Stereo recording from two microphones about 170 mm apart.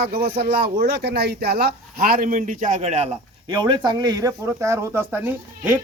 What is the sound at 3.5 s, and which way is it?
Speech, 25° right (ahead or behind).